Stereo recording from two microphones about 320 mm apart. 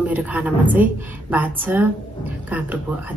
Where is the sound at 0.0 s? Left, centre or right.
Centre.